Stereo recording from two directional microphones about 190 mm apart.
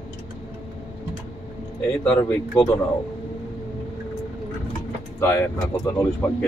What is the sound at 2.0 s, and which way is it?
Speech, 10° left (ahead or behind).